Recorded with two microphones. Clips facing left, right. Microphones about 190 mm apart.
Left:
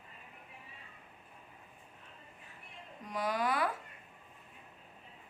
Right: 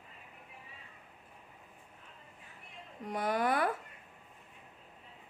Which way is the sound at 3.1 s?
55° right (ahead or behind).